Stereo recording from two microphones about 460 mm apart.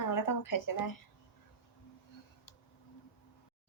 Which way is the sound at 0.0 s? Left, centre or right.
Left.